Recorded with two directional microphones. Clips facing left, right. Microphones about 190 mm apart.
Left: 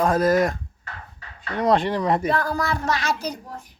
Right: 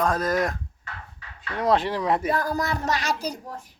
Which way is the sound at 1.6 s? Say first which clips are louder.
Left 2 dB; 5° right (ahead or behind).